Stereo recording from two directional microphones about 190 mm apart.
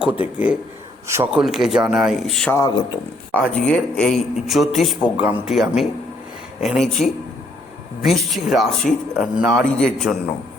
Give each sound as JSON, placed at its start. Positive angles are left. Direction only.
{"t": 0.0, "sound": "a man's voice", "side_deg": -5}
{"t": 2.5, "sound": "speech", "side_deg": 20}
{"t": 3.3, "sound": "a man's voice", "side_deg": 5}